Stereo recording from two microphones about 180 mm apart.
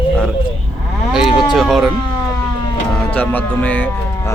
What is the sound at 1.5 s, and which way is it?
Speech, centre (ahead or behind).